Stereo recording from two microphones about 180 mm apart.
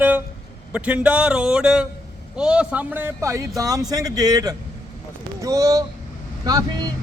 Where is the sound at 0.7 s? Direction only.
5° right (ahead or behind).